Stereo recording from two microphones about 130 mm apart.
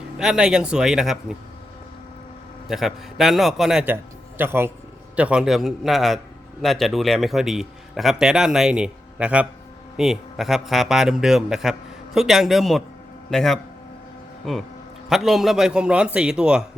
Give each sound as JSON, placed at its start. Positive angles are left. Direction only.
{"t": 0.2, "sound": "a man's voice", "side_deg": -5}
{"t": 2.6, "sound": "a man's voice", "side_deg": 0}
{"t": 3.8, "sound": "a man's voice", "side_deg": -15}